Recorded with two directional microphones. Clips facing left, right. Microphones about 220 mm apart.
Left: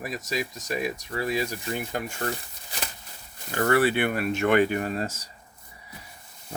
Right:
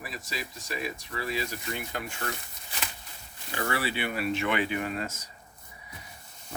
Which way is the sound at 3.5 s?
55° left (ahead or behind).